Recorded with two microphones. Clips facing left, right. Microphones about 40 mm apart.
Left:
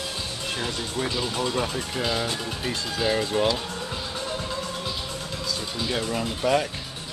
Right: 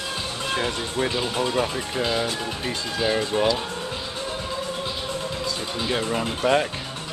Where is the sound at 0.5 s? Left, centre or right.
Right; by 3.5 s centre.